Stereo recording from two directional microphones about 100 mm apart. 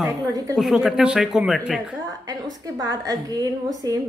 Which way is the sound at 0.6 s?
Centre (ahead or behind).